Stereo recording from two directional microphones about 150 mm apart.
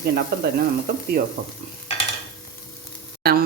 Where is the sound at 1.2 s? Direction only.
65° right (ahead or behind).